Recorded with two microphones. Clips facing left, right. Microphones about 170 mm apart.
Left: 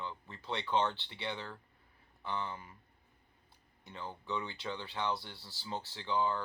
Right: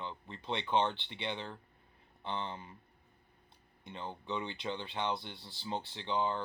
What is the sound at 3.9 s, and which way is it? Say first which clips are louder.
Speech: right 1 dB; 20° right (ahead or behind).